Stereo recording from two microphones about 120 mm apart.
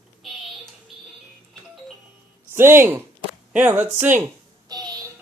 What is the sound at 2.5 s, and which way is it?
Speech, 20° right (ahead or behind).